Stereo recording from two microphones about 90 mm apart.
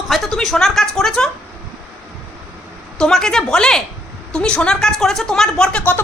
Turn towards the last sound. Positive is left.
turn(degrees=15)  # may be behind; listen again after turning